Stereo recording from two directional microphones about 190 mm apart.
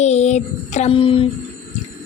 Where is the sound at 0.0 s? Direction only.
35° left (ahead or behind).